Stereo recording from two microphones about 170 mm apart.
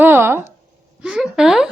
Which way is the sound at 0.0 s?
15° right (ahead or behind).